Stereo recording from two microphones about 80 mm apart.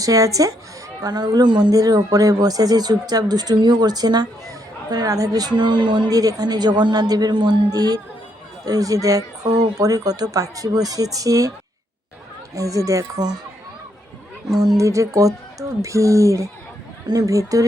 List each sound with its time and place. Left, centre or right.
0.0 s speech: right
1.0 s speech: right
6.1 s speech: right
12.5 s speech: right
14.6 s speech: right